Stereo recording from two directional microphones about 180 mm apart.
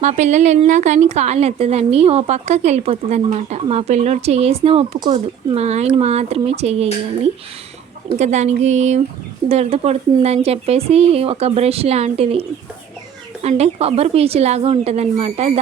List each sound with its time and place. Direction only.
0.0 s a woman's voice: 40° right (ahead or behind)
8.2 s a woman's voice: 40° right (ahead or behind)